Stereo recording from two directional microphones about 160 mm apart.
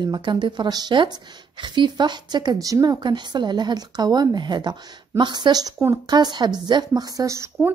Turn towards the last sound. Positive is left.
turn(degrees=-20)  # may be behind; listen again after turning